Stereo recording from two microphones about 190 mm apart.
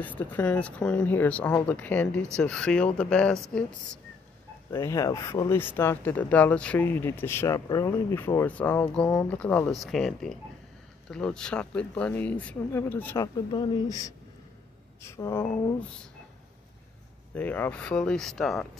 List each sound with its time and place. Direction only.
0.0 s speech: 10° left (ahead or behind)
4.7 s speech: 15° left (ahead or behind)
17.3 s speech: 10° left (ahead or behind)